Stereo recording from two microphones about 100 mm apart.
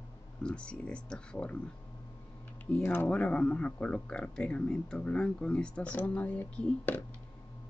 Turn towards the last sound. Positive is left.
turn(degrees=15)  # may be behind; listen again after turning